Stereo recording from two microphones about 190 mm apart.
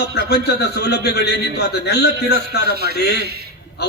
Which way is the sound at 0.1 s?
60° left (ahead or behind).